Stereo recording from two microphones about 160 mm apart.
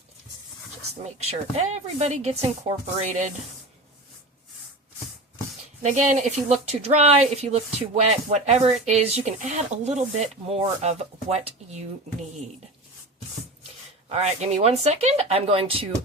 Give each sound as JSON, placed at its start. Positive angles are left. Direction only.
{"t": 0.8, "sound": "speech", "side_deg": -40}
{"t": 5.8, "sound": "speech", "side_deg": -45}
{"t": 14.1, "sound": "speech", "side_deg": -40}